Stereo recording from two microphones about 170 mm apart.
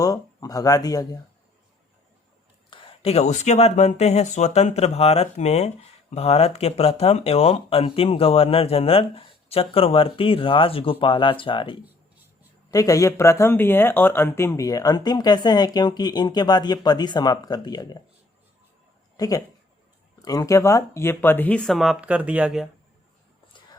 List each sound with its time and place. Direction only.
0.0 s speech: 20° left (ahead or behind)
2.6 s speech: 30° left (ahead or behind)
12.7 s speech: 20° left (ahead or behind)
19.1 s speech: 20° left (ahead or behind); by 22.6 s 5° right (ahead or behind)